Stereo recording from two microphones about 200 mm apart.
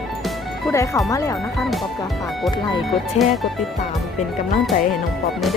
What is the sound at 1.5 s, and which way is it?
Speech, centre (ahead or behind).